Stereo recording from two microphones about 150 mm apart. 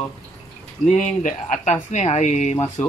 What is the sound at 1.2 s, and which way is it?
Speech, 55° left (ahead or behind).